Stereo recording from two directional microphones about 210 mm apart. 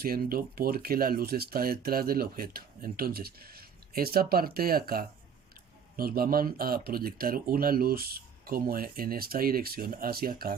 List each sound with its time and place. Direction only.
0.0 s speech: 45° right (ahead or behind)